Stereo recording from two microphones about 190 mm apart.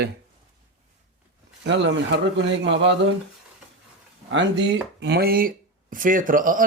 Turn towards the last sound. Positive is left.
turn(degrees=-45)  # may be behind; listen again after turning